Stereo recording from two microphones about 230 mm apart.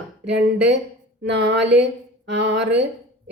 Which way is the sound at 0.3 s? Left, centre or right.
Right.